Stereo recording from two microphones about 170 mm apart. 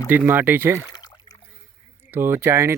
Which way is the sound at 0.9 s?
25° left (ahead or behind).